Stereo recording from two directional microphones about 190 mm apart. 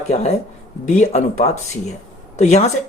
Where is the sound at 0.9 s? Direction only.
35° left (ahead or behind).